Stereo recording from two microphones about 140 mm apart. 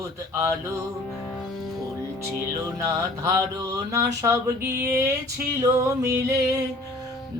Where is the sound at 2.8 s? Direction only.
20° right (ahead or behind).